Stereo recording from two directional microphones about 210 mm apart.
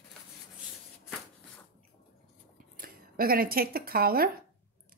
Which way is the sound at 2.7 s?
45° right (ahead or behind).